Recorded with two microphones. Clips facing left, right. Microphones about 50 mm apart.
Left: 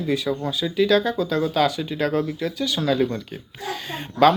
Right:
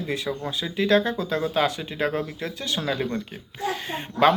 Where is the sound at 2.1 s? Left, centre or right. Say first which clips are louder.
Left 5 dB; centre.